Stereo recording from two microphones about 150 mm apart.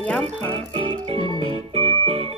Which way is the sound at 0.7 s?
40° right (ahead or behind).